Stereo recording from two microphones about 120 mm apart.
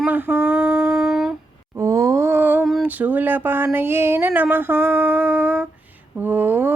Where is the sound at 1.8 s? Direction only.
25° right (ahead or behind).